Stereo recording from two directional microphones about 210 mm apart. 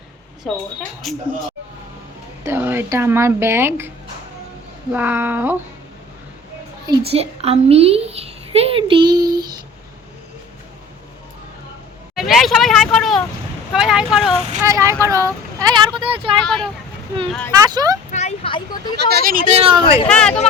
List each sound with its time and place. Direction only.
0.4 s speech: centre (ahead or behind)
2.4 s speech: 10° right (ahead or behind)
6.8 s a child's voice: 30° right (ahead or behind)
12.1 s speech: centre (ahead or behind)
14.6 s a child's voice: 15° right (ahead or behind)
16.4 s speech: 5° left (ahead or behind)
17.5 s speech: 20° right (ahead or behind)
18.1 s a sound: 30° left (ahead or behind)
18.9 s speech: 50° right (ahead or behind); by 19.8 s 30° right (ahead or behind)
20.1 s speech: 5° left (ahead or behind)